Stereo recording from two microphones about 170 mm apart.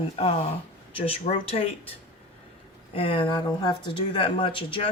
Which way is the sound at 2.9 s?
30° left (ahead or behind).